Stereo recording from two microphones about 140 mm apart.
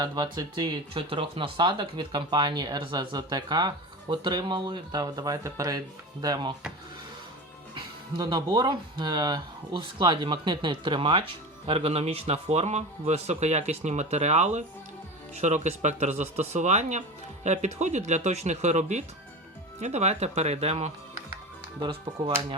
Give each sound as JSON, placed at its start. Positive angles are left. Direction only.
{"t": 0.0, "sound": "speech", "side_deg": -30}
{"t": 7.8, "sound": "speech", "side_deg": -30}